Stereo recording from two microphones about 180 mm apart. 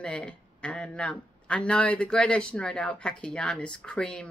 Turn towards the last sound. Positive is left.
turn(degrees=5)  # may be behind; listen again after turning